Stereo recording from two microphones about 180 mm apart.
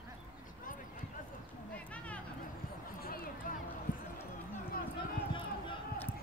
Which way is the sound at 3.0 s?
55° left (ahead or behind).